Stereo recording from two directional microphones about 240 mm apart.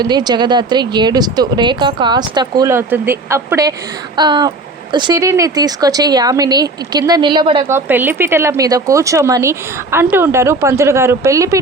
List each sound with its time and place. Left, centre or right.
0.0 s speech: centre
7.9 s speech: centre